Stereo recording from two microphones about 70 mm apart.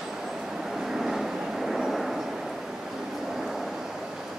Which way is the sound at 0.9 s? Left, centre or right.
Centre.